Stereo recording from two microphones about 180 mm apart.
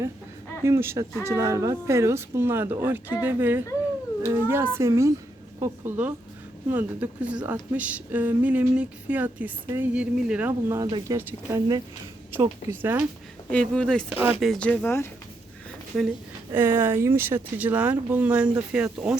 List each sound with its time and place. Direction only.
0.6 s a woman's voice: 15° right (ahead or behind)
10.8 s speech: 25° right (ahead or behind)
11.2 s speech: 10° right (ahead or behind)
13.5 s speech: 5° left (ahead or behind)
16.5 s speech: 10° right (ahead or behind)